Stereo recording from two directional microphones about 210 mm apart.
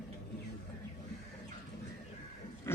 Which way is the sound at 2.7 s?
10° left (ahead or behind).